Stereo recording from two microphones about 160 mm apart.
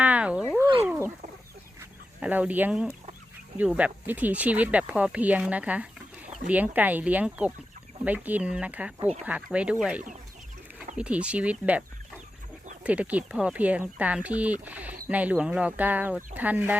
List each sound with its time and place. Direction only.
0.0 s cat: 10° right (ahead or behind)
0.9 s chicken: 15° right (ahead or behind)
3.8 s speech: 10° right (ahead or behind)
12.8 s speech: 10° right (ahead or behind)